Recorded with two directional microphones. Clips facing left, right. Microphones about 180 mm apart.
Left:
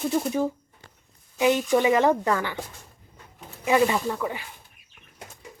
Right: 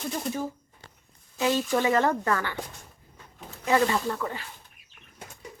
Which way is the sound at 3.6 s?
15° left (ahead or behind).